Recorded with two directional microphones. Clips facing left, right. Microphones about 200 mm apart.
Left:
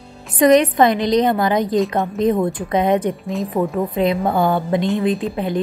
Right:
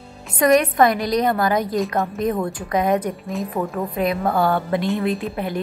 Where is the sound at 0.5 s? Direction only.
20° left (ahead or behind).